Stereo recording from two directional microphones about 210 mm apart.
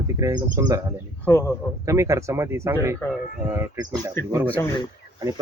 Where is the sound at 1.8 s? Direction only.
15° right (ahead or behind).